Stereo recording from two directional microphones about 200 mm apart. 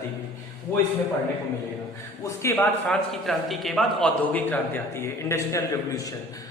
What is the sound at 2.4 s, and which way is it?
A man's voice, 10° left (ahead or behind).